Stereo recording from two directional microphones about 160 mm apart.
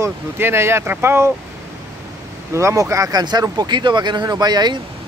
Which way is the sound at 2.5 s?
20° right (ahead or behind).